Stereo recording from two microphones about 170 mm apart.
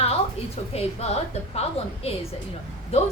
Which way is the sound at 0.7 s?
35° left (ahead or behind).